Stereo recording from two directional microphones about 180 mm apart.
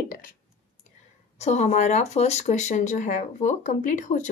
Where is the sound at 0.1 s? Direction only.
50° left (ahead or behind).